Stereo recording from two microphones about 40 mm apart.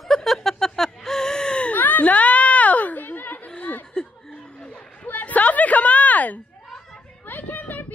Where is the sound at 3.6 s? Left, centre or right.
Left.